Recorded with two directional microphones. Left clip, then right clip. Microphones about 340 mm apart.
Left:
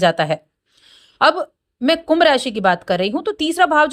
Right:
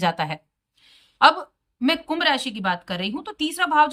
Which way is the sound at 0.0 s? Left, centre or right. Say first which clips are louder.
Left 8 dB; centre.